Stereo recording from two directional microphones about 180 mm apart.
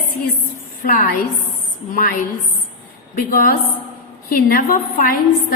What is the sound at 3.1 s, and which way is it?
A woman's voice, 55° left (ahead or behind).